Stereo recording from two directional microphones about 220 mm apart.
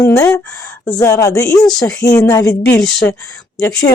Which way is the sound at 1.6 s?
5° left (ahead or behind).